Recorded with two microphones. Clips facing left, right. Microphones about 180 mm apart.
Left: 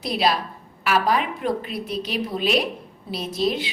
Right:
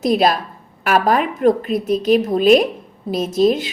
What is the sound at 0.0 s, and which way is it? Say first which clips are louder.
Speech: right 7 dB; 50° right (ahead or behind).